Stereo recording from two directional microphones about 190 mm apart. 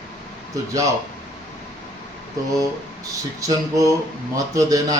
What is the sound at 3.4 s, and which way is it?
Speech, 15° right (ahead or behind).